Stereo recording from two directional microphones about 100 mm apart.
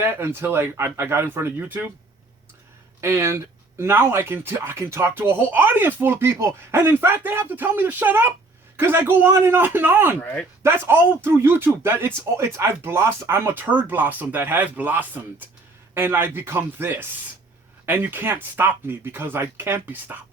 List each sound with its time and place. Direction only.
0.0 s speech: 25° right (ahead or behind)
3.0 s speech: 25° right (ahead or behind)